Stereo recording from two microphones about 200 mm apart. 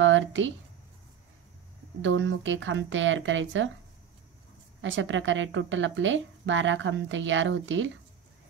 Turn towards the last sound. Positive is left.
turn(degrees=-70)  # may be behind; listen again after turning